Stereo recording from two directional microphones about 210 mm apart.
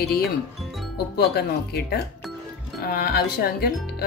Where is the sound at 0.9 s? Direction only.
50° left (ahead or behind).